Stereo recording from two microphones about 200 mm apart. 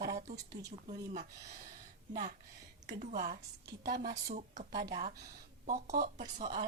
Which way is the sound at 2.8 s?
35° right (ahead or behind).